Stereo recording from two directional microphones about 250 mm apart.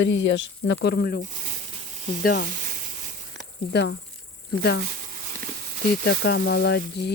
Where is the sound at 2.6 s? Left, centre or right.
Right.